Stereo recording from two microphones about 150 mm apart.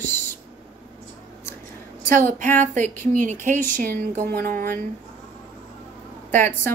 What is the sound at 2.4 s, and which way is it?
Speech, 55° right (ahead or behind).